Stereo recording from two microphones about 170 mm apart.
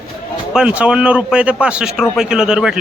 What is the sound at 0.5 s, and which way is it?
A man's voice, 5° right (ahead or behind).